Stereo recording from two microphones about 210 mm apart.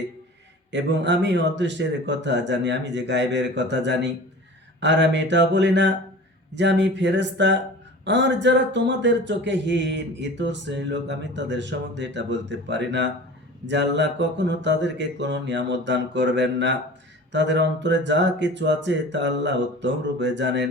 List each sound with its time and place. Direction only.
0.7 s speech: 55° right (ahead or behind)